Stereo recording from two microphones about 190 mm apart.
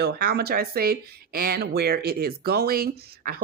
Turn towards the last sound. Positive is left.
turn(degrees=-50)  # may be behind; listen again after turning